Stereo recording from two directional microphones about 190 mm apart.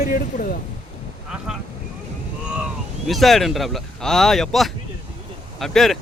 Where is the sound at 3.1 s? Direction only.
Centre (ahead or behind).